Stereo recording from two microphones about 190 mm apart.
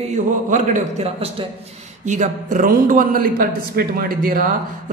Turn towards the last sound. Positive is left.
turn(degrees=-50)  # may be behind; listen again after turning